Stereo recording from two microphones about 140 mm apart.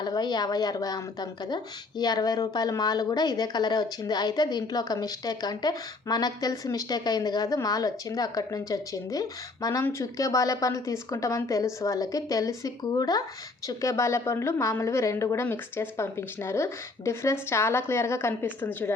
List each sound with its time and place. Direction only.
0.0 s a woman's voice: 30° left (ahead or behind); by 18.9 s 15° left (ahead or behind)